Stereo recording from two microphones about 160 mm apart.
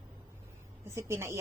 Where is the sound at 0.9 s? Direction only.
15° right (ahead or behind).